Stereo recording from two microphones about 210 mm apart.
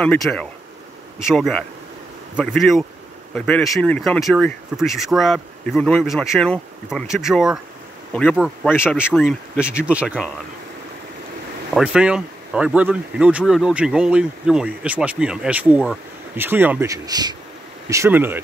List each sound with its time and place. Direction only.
0.0 s speech: 5° left (ahead or behind)
9.8 s speech: 5° right (ahead or behind)
11.7 s speech: 5° right (ahead or behind)